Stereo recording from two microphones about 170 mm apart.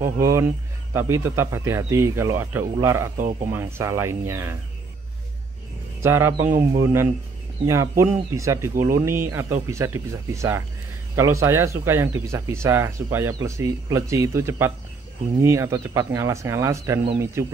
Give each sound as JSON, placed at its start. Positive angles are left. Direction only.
{"t": 0.0, "sound": "speech", "side_deg": -15}
{"t": 6.0, "sound": "speech", "side_deg": -15}